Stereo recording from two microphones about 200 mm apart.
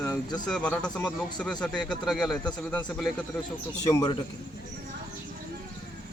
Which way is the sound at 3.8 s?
20° left (ahead or behind).